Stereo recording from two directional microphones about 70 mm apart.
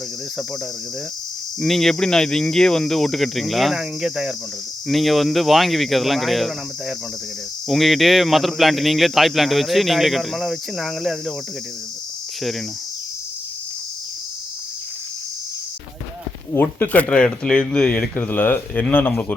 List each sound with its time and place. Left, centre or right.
1.6 s a man's voice: centre
12.4 s cricket: centre
16.6 s speech: left